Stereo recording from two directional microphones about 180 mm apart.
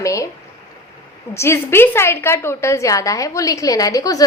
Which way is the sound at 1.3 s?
15° left (ahead or behind).